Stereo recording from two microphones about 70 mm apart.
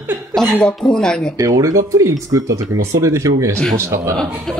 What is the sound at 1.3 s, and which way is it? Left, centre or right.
A man's voice, right.